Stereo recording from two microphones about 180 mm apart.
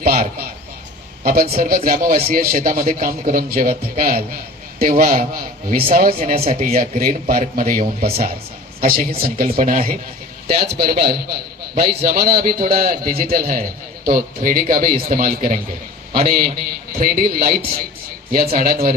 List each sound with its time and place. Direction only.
0.0 s a sound: 55° right (ahead or behind)
1.2 s a man's voice: 55° right (ahead or behind)
10.5 s a man's voice: 60° right (ahead or behind)